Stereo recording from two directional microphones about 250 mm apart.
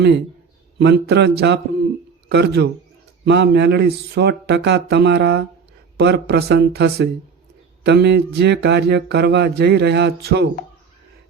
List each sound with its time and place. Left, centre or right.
0.8 s speech: right